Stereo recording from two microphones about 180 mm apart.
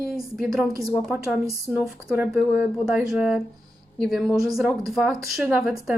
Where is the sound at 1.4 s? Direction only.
15° right (ahead or behind).